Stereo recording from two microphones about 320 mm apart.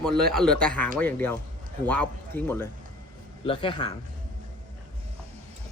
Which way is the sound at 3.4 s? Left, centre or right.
Centre.